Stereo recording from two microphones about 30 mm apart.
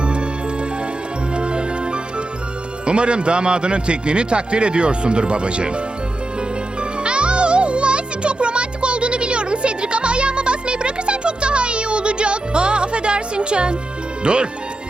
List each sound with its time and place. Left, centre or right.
0.0 s music: right
1.4 s music: right
2.8 s a man's voice: right
7.0 s music: right
14.3 s a man's voice: right